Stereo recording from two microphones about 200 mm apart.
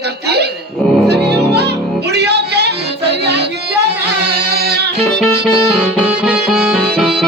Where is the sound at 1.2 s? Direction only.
55° right (ahead or behind).